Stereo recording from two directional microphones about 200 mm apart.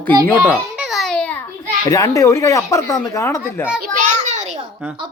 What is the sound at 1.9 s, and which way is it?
Speech, 15° left (ahead or behind).